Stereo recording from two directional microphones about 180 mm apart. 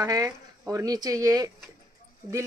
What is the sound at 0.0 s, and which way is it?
Speech, 20° right (ahead or behind).